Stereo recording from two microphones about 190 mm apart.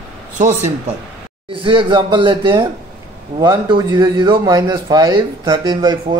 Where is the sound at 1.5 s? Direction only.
25° right (ahead or behind).